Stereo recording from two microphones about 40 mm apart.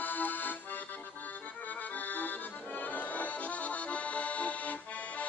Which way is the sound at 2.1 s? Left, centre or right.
Left.